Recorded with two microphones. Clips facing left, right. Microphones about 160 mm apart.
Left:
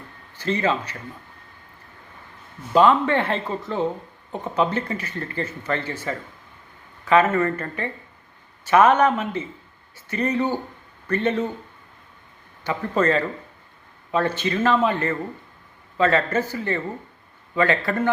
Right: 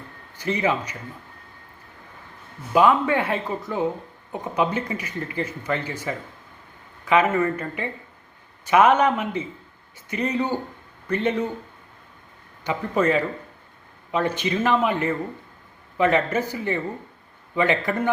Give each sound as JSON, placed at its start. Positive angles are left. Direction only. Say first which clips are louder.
{"t": 0.3, "sound": "speech", "louder": "left 1 dB", "side_deg": -15}
{"t": 2.7, "sound": "speech", "louder": "left 1 dB", "side_deg": -10}
{"t": 12.6, "sound": "speech", "louder": "even", "side_deg": -15}